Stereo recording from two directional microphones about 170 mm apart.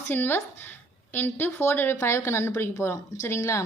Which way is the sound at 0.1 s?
10° left (ahead or behind).